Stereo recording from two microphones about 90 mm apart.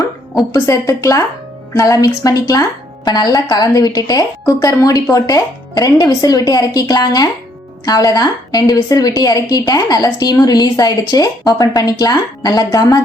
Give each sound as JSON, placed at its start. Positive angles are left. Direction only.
{"t": 0.5, "sound": "a woman's voice", "side_deg": 35}